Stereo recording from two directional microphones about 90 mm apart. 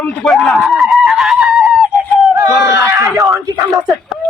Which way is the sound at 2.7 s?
35° right (ahead or behind).